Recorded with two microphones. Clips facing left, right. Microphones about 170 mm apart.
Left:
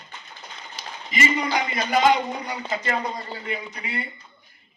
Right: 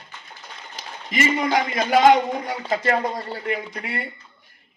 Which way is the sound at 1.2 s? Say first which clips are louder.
Right 3 dB; 50° right (ahead or behind).